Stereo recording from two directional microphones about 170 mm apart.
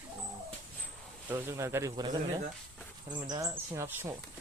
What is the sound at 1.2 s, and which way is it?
Speech, 15° right (ahead or behind).